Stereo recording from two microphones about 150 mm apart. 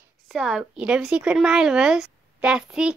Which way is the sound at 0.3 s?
Centre (ahead or behind).